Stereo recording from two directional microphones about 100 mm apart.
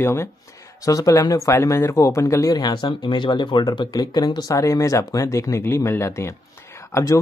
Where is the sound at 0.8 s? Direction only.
35° left (ahead or behind).